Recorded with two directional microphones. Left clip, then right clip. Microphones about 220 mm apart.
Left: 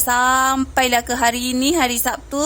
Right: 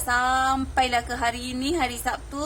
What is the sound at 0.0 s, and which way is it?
A woman's voice, 40° left (ahead or behind).